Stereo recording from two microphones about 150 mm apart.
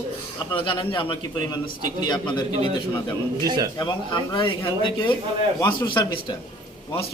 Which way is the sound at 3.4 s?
25° right (ahead or behind).